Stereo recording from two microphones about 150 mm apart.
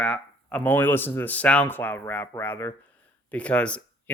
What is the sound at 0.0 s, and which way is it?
Speech, 10° left (ahead or behind).